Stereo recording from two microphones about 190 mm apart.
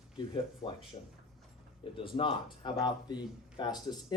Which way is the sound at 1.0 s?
30° left (ahead or behind).